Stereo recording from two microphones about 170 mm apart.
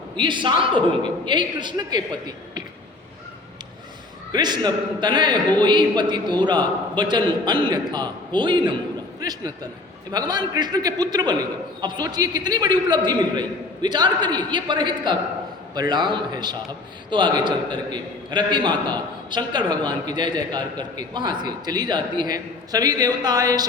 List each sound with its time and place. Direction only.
0.2 s a man's voice: 30° right (ahead or behind)
4.3 s a man's voice: 25° right (ahead or behind)